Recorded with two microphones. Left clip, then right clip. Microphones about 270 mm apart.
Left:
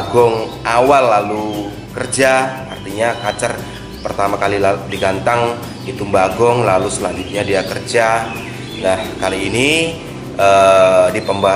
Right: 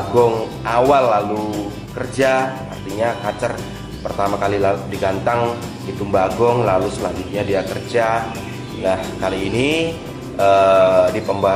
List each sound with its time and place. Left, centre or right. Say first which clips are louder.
0.1 s a man's voice: left 3 dB; centre